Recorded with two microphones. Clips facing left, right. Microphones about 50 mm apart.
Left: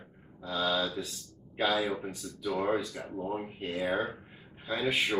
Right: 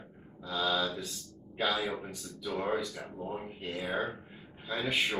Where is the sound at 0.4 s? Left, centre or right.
Left.